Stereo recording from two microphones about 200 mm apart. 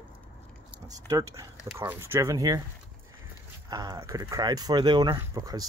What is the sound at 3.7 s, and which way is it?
Speech, 20° right (ahead or behind).